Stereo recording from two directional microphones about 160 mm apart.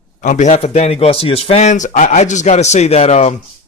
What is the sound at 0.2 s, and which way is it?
Speech, 50° left (ahead or behind).